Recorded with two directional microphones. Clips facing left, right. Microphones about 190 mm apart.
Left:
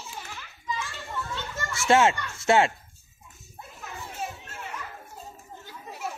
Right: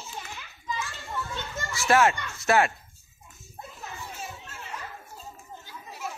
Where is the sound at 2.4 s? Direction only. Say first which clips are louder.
Left 2 dB; 25° left (ahead or behind).